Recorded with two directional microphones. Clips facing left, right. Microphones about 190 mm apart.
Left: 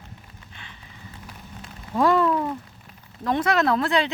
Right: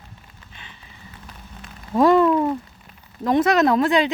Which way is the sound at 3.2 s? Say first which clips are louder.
Right 5 dB; 20° right (ahead or behind).